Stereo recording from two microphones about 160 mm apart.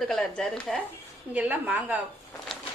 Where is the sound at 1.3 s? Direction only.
10° right (ahead or behind).